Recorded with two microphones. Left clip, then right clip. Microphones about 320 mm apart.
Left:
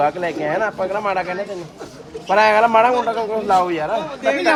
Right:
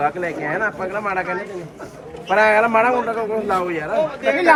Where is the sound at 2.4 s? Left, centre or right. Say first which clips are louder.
Left 2 dB; left.